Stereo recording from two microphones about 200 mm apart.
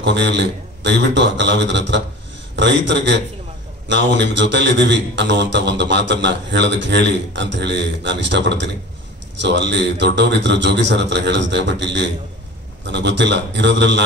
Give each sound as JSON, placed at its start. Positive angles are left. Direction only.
{"t": 0.0, "sound": "a man's voice", "side_deg": -60}